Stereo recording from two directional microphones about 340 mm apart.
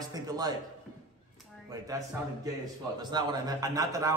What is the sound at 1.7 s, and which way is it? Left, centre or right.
A man's voice, centre.